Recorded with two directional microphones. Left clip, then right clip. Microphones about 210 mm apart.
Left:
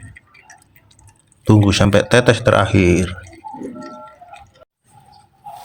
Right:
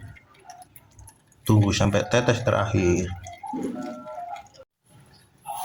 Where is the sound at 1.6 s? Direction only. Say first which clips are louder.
Left 9 dB; 30° left (ahead or behind).